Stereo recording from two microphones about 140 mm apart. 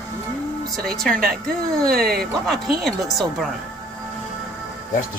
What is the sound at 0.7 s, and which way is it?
Speech, 5° left (ahead or behind).